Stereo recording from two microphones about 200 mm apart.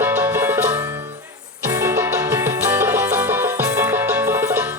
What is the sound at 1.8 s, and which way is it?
Music, 10° right (ahead or behind).